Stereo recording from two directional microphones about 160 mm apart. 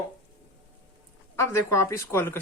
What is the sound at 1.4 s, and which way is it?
Speech, 15° left (ahead or behind).